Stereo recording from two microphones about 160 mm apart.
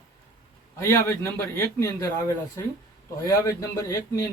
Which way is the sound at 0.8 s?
15° left (ahead or behind).